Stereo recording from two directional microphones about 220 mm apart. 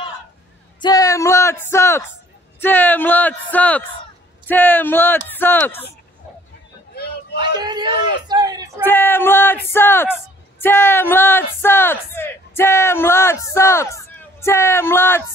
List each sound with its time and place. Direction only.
0.7 s a sound: 15° left (ahead or behind)
2.6 s speech: 10° left (ahead or behind)
7.3 s speech: 20° right (ahead or behind)
8.8 s speech: 10° left (ahead or behind)